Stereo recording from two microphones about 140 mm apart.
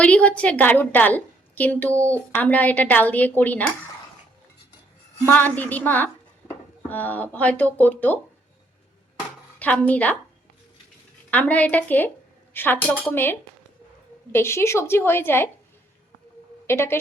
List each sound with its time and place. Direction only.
0.0 s a woman's voice: 10° left (ahead or behind)
5.2 s a woman's voice: 10° left (ahead or behind)
9.6 s a woman's voice: 10° left (ahead or behind)
11.3 s a woman's voice: 10° left (ahead or behind)
14.3 s a woman's voice: 20° left (ahead or behind)
16.6 s a woman's voice: 15° left (ahead or behind)